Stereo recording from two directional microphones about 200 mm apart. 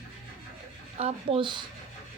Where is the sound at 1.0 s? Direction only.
30° right (ahead or behind).